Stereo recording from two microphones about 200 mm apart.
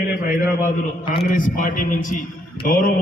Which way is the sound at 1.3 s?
40° left (ahead or behind).